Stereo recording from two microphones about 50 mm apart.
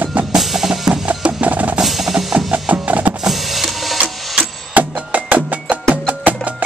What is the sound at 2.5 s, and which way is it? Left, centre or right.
Music, right.